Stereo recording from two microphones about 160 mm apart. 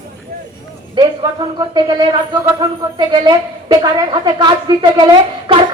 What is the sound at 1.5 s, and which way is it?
A woman's voice, 25° right (ahead or behind).